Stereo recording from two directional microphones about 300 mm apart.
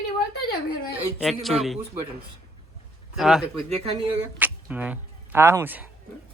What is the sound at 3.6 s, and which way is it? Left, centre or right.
Speech, centre.